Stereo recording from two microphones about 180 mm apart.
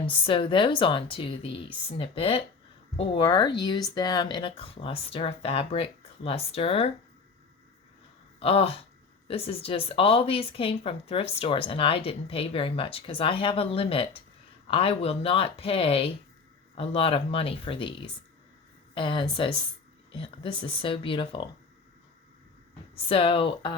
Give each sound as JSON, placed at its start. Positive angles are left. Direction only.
{"t": 0.0, "sound": "speech", "side_deg": 30}
{"t": 8.4, "sound": "speech", "side_deg": 30}
{"t": 23.0, "sound": "speech", "side_deg": 30}